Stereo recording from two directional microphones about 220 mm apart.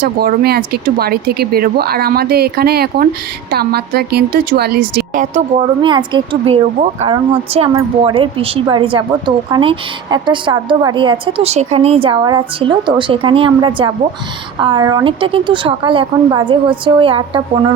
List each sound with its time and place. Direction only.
0.0 s a woman's voice: 45° right (ahead or behind)
5.8 s a woman's voice: 20° right (ahead or behind)